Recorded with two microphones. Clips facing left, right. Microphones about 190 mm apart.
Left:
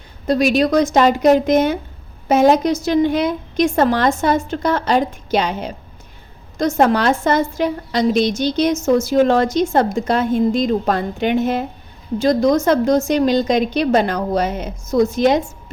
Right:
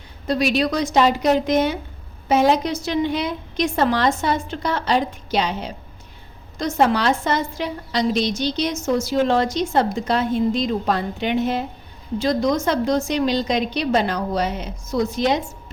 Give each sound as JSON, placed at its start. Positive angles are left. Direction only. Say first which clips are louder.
{"t": 0.3, "sound": "a woman's voice", "louder": "left 5 dB", "side_deg": 45}